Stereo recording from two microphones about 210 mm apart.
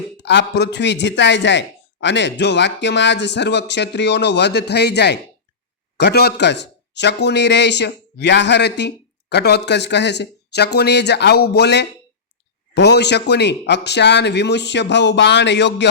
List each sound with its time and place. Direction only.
0.2 s speech: 55° left (ahead or behind)